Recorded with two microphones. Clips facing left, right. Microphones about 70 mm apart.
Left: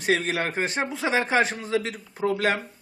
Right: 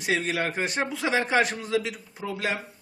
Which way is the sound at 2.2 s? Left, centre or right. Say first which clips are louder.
Left 8 dB; left.